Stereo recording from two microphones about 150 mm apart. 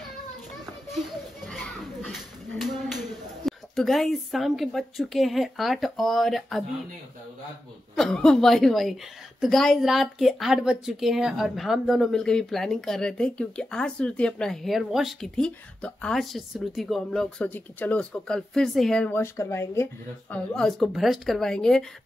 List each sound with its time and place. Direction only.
1.4 s a sound: 5° left (ahead or behind)
7.9 s a woman's voice: 5° left (ahead or behind)
19.0 s speech: 15° left (ahead or behind)
20.5 s a woman's voice: centre (ahead or behind)